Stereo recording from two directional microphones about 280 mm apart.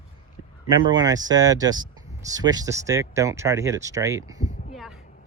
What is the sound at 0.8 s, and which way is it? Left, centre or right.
Speech, centre.